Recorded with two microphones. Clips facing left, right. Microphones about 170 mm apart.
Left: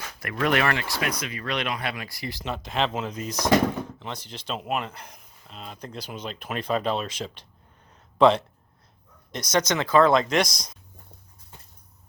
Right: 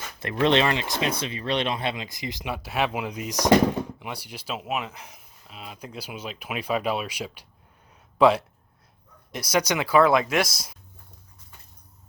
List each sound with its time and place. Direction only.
0.2 s speech: 25° right (ahead or behind); by 10.8 s 5° right (ahead or behind)